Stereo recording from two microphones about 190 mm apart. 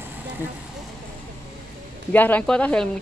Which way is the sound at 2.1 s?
10° left (ahead or behind).